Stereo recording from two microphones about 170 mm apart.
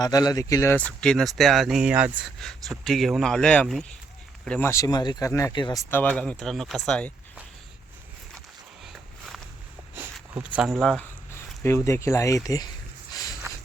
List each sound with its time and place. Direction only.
0.0 s speech: 20° left (ahead or behind); by 2.2 s 10° right (ahead or behind)
2.4 s speech: centre (ahead or behind)
4.7 s speech: 20° left (ahead or behind)
5.9 s speech: 10° left (ahead or behind)
8.8 s walk: centre (ahead or behind)
10.3 s speech: 5° right (ahead or behind)
11.3 s speech: 15° left (ahead or behind)